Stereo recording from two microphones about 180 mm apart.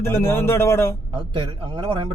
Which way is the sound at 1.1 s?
30° right (ahead or behind).